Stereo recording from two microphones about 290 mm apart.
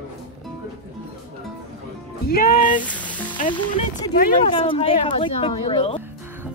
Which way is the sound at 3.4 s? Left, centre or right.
Centre.